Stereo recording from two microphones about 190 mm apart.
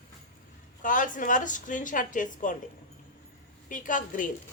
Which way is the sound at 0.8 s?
45° left (ahead or behind).